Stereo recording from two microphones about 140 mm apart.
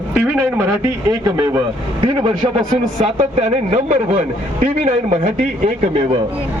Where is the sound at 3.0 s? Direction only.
50° right (ahead or behind).